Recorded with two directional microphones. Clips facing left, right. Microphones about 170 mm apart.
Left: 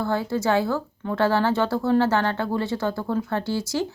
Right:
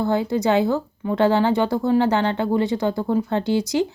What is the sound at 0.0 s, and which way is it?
Speech, 20° right (ahead or behind).